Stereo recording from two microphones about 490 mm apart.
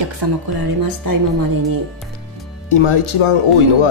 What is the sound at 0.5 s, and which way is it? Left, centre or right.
Speech, right.